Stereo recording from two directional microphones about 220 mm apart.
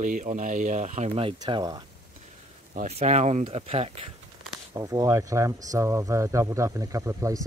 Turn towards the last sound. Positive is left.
turn(degrees=-15)  # may be behind; listen again after turning